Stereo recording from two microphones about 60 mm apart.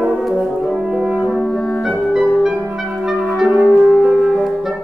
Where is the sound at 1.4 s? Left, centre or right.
Centre.